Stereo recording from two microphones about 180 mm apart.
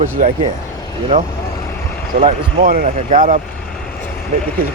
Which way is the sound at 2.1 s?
45° right (ahead or behind).